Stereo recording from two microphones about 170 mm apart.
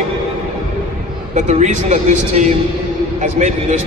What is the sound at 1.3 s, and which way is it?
A man's voice, 45° right (ahead or behind).